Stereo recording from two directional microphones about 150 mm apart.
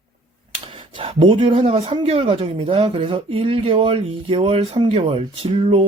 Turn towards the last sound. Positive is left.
turn(degrees=-35)  # may be behind; listen again after turning